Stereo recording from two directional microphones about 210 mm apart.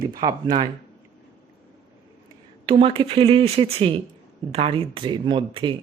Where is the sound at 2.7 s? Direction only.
25° right (ahead or behind).